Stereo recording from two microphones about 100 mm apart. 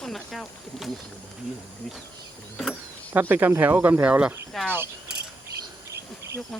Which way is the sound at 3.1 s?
20° right (ahead or behind).